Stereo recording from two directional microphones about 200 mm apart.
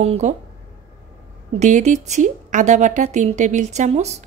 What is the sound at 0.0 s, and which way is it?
Speech, 35° right (ahead or behind).